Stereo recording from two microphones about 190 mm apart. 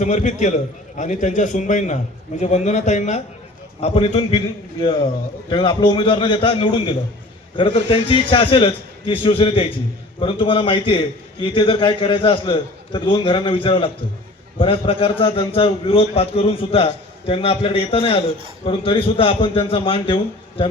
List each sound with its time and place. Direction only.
0.0 s a man's voice: 40° left (ahead or behind)
5.5 s a man's voice: 25° left (ahead or behind)